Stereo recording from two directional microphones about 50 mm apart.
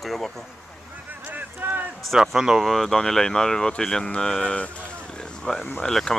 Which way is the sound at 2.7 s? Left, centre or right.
Centre.